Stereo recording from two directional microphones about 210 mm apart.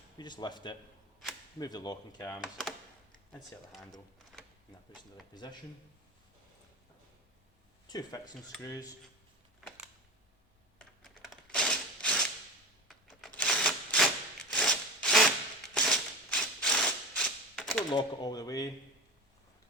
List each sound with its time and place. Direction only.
0.2 s speech: 20° left (ahead or behind)
2.4 s speech: centre (ahead or behind)
5.3 s speech: 20° left (ahead or behind)
7.9 s speech: 20° left (ahead or behind)
9.6 s a sound: centre (ahead or behind)
11.5 s a sound: 5° left (ahead or behind)
17.9 s speech: 20° left (ahead or behind)